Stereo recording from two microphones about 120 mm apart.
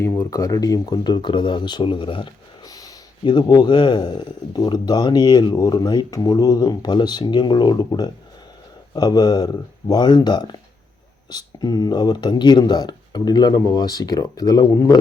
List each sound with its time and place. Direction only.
0.0 s speech: 25° left (ahead or behind); by 2.3 s 45° left (ahead or behind)
2.6 s speech: 30° left (ahead or behind)